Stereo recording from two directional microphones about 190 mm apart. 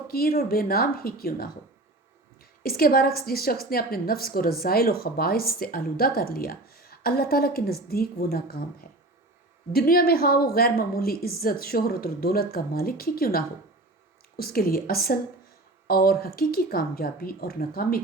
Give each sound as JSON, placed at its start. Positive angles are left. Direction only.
{"t": 0.1, "sound": "a woman's voice", "side_deg": 50}
{"t": 9.7, "sound": "a woman's voice", "side_deg": 50}